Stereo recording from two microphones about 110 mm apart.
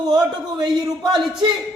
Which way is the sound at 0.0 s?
35° right (ahead or behind).